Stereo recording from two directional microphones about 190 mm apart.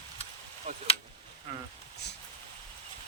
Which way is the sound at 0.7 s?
35° right (ahead or behind).